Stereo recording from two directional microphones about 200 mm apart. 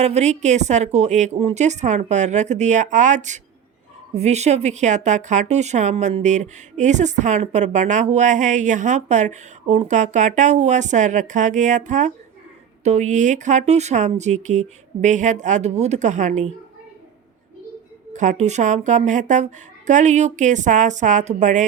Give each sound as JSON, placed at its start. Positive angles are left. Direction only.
{"t": 0.0, "sound": "a woman's voice", "side_deg": -35}
{"t": 18.1, "sound": "a woman's voice", "side_deg": -35}